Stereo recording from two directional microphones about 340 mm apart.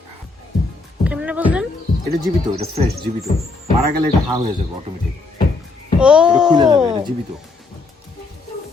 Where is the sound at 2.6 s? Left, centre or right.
Centre.